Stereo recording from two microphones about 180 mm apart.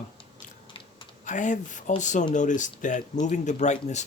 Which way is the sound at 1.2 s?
45° left (ahead or behind).